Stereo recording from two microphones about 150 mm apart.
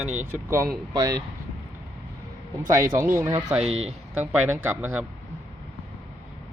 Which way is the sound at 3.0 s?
15° right (ahead or behind).